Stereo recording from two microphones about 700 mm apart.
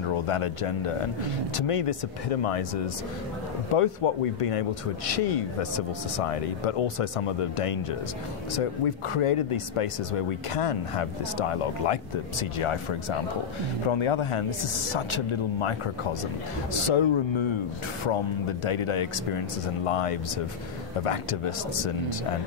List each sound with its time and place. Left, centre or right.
0.1 s a man's voice: left